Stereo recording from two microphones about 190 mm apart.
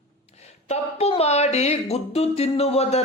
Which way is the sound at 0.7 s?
35° left (ahead or behind).